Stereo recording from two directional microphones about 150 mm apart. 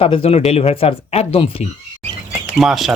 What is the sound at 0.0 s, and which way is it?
Speech, 40° left (ahead or behind).